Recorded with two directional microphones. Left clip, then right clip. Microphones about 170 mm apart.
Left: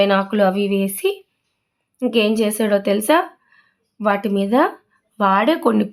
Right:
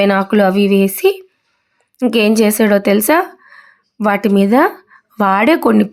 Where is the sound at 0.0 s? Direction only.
30° right (ahead or behind).